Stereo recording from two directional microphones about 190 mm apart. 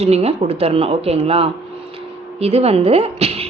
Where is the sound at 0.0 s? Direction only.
35° right (ahead or behind).